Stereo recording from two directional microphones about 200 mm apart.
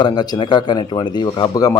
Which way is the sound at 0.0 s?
20° left (ahead or behind).